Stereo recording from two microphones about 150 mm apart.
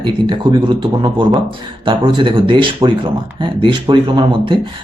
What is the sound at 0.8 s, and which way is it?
Speech, 30° right (ahead or behind).